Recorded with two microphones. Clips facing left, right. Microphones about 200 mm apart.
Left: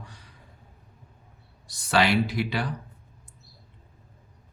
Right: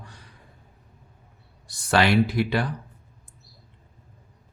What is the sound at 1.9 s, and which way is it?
Speech, 55° right (ahead or behind).